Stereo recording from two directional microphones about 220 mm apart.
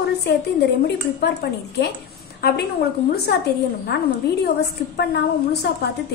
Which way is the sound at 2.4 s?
45° left (ahead or behind).